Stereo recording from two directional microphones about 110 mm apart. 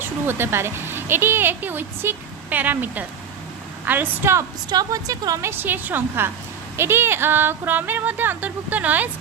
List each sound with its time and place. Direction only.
0.3 s speech: 20° right (ahead or behind)
4.7 s speech: 35° right (ahead or behind); by 9.0 s 15° right (ahead or behind)